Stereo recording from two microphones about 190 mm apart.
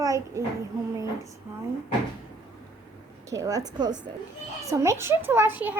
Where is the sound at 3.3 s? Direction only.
20° right (ahead or behind).